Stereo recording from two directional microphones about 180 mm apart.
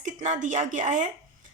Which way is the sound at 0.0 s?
45° right (ahead or behind).